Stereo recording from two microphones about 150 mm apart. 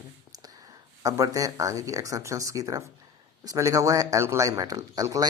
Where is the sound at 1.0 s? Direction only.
20° right (ahead or behind).